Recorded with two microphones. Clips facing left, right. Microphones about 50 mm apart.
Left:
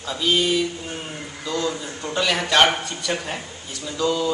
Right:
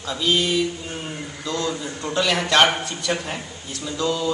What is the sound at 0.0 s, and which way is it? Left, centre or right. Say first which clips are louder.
A man's voice: even; centre.